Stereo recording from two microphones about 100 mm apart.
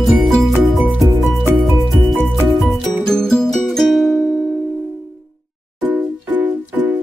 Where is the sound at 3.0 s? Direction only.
5° left (ahead or behind).